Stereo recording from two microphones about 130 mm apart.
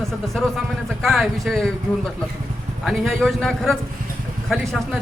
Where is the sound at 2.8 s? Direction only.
Centre (ahead or behind).